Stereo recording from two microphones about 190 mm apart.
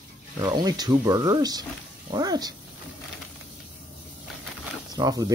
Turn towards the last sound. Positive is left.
turn(degrees=-20)  # may be behind; listen again after turning